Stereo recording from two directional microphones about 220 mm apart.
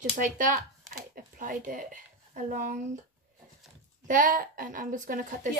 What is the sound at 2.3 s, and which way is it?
Speech, 35° right (ahead or behind).